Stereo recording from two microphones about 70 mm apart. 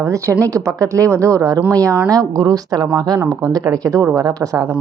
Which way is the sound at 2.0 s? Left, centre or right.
Right.